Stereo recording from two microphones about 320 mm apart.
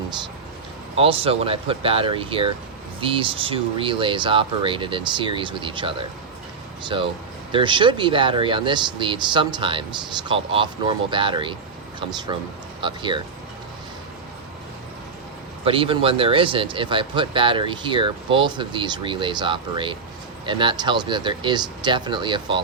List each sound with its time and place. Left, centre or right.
0.9 s speech: centre
15.6 s speech: centre